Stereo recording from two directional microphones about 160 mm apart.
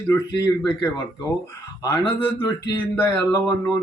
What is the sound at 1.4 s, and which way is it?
Speech, 20° left (ahead or behind).